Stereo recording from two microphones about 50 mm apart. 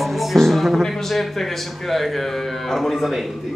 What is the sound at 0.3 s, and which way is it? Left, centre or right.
Speech, centre.